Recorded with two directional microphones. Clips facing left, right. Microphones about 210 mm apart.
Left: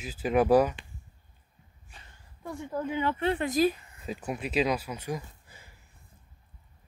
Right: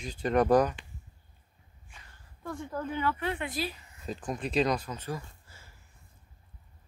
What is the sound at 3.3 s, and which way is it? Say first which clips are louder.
Speech: left 9 dB; 40° left (ahead or behind).